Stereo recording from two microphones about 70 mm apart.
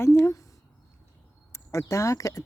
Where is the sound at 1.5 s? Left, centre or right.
Left.